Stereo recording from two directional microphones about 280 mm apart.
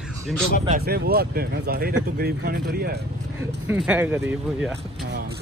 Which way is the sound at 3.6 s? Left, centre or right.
Centre.